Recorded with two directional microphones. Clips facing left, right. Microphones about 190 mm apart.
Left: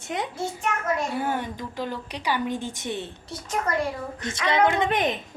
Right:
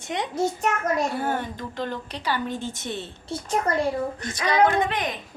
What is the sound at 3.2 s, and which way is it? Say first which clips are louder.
Speech: right 10 dB; 30° right (ahead or behind).